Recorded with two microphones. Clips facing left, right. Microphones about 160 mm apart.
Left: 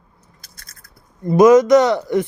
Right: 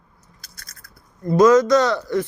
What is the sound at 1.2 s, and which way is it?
Speech, 20° left (ahead or behind).